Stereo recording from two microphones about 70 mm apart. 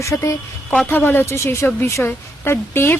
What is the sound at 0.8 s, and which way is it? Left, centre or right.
A woman's voice, left.